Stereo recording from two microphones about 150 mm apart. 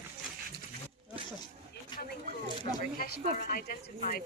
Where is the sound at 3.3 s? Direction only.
75° left (ahead or behind).